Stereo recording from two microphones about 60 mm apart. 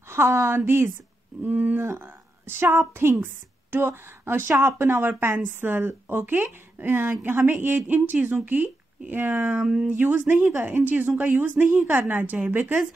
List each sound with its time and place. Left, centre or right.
0.1 s a woman's voice: right
1.4 s a woman's voice: right
1.8 s speech: right
9.6 s speech: centre
9.8 s a woman's voice: right